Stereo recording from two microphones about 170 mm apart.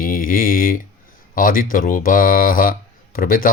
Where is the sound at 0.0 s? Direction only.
55° left (ahead or behind).